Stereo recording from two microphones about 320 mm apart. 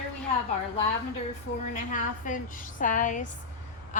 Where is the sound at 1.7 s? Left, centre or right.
Left.